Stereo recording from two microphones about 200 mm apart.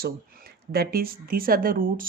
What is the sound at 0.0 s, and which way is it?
Speech, 50° right (ahead or behind).